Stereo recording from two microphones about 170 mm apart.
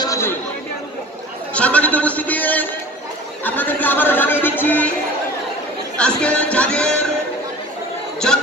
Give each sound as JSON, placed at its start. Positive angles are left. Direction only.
{"t": 0.0, "sound": "chatter", "side_deg": 20}
{"t": 1.5, "sound": "speech", "side_deg": 5}
{"t": 5.9, "sound": "speech", "side_deg": 5}